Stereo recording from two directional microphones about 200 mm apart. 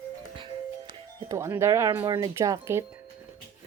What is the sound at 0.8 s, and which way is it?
Speech, 15° right (ahead or behind).